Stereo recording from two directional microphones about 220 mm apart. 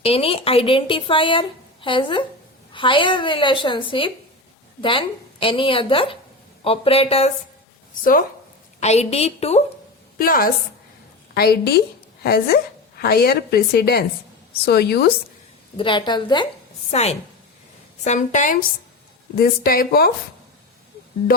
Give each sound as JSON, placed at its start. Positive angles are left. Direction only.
{"t": 0.0, "sound": "a woman's voice", "side_deg": 25}
{"t": 8.8, "sound": "a woman's voice", "side_deg": 30}
{"t": 10.2, "sound": "a woman's voice", "side_deg": 40}
{"t": 15.8, "sound": "a woman's voice", "side_deg": 20}